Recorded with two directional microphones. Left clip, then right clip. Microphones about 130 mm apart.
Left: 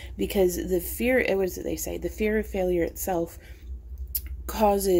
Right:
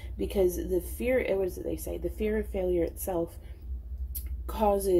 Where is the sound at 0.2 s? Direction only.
40° left (ahead or behind).